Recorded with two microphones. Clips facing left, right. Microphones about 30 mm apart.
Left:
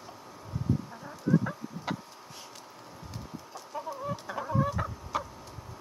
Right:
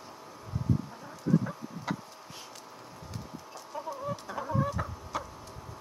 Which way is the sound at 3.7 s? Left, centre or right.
Centre.